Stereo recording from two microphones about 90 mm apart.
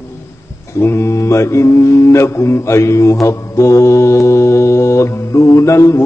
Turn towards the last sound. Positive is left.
turn(degrees=35)  # may be behind; listen again after turning